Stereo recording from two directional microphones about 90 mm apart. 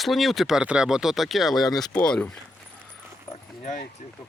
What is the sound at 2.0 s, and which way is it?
Speech, 10° left (ahead or behind).